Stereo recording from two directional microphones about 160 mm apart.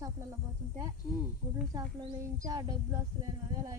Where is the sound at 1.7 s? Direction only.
25° right (ahead or behind).